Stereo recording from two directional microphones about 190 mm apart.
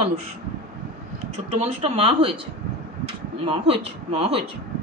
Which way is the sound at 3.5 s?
30° right (ahead or behind).